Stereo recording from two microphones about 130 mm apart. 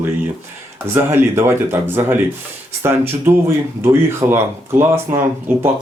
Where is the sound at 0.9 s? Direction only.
15° right (ahead or behind).